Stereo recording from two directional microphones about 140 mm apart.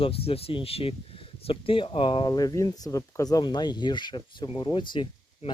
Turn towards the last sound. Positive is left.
turn(degrees=35)  # may be behind; listen again after turning